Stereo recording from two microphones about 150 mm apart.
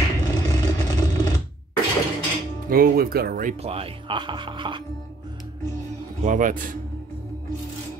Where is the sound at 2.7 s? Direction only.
80° right.